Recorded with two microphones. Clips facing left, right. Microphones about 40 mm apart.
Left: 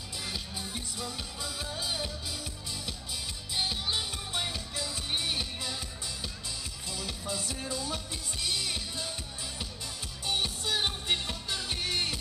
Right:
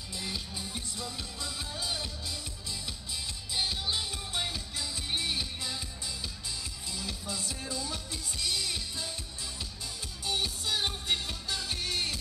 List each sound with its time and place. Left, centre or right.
0.2 s music: centre
3.5 s music: centre
6.9 s music: centre
10.2 s music: centre